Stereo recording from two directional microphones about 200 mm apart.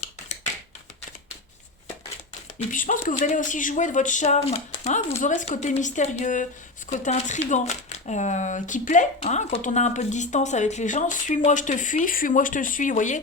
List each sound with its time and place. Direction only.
2.6 s speech: 40° left (ahead or behind)